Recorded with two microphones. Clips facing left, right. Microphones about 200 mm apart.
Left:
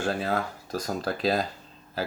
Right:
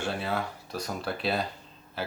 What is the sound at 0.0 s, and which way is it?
A man's voice, 40° left (ahead or behind).